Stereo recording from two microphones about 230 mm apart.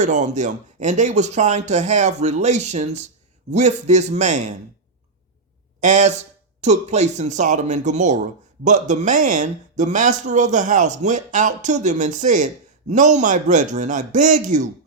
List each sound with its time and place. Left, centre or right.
0.0 s speech: right
5.8 s speech: right